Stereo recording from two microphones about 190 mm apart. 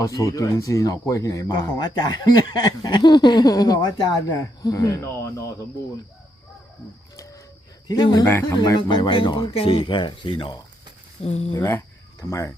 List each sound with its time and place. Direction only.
0.0 s speech: 20° left (ahead or behind)
7.9 s speech: 20° left (ahead or behind)
11.5 s speech: 15° left (ahead or behind)